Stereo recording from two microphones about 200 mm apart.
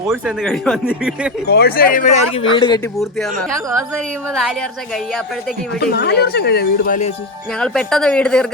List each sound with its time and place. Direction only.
0.1 s speech: centre (ahead or behind)
1.5 s speech: 50° left (ahead or behind); by 2.9 s 20° left (ahead or behind)
5.8 s speech: 50° left (ahead or behind)
7.6 s speech: 5° left (ahead or behind)